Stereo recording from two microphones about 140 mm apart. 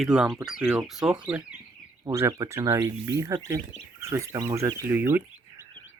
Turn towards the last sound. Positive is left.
turn(degrees=-15)  # may be behind; listen again after turning